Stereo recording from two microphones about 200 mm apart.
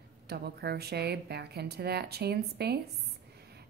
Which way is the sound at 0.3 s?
55° right (ahead or behind).